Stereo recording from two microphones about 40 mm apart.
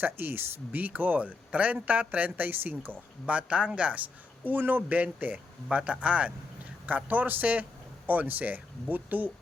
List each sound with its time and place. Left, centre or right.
0.0 s a man's voice: right
1.5 s a man's voice: right
3.2 s a man's voice: right
5.7 s a man's voice: right
6.8 s a man's voice: right